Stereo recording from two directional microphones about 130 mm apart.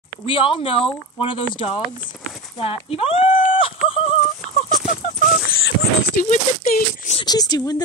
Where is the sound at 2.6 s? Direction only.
45° left (ahead or behind).